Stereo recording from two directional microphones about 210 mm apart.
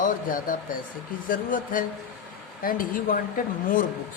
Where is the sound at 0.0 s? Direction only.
40° left (ahead or behind).